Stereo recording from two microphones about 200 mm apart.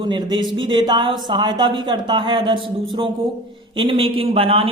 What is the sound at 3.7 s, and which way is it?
A man's voice, 25° right (ahead or behind).